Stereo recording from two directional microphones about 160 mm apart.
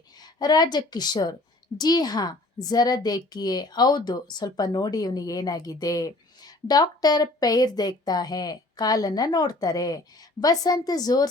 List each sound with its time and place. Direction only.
0.2 s a woman's voice: 25° left (ahead or behind)